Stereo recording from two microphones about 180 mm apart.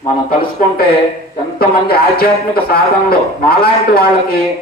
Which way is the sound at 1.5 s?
60° left (ahead or behind).